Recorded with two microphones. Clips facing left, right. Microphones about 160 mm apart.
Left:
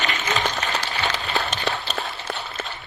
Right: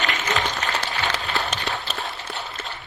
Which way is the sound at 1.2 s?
Centre (ahead or behind).